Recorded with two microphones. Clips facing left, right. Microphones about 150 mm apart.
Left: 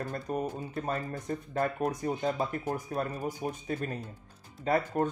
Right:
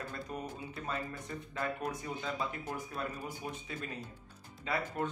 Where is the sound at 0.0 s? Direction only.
45° left (ahead or behind).